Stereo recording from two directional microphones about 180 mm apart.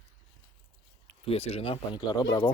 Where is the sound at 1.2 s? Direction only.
35° left (ahead or behind).